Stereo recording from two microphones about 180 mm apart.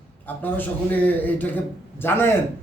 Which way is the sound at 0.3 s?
10° left (ahead or behind).